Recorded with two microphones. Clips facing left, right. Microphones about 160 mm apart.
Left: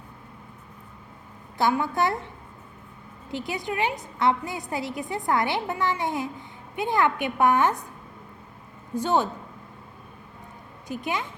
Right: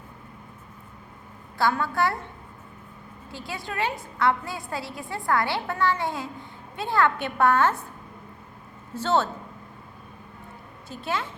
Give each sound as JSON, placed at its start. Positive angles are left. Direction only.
{"t": 1.5, "sound": "a woman's voice", "side_deg": 20}
{"t": 3.3, "sound": "a woman's voice", "side_deg": 20}
{"t": 9.0, "sound": "a woman's voice", "side_deg": 15}
{"t": 10.8, "sound": "a woman's voice", "side_deg": 15}